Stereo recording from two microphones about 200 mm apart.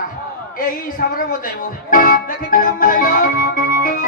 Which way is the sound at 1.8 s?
45° left (ahead or behind).